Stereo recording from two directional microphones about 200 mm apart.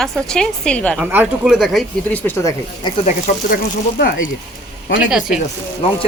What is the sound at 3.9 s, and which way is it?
Speech, 45° left (ahead or behind).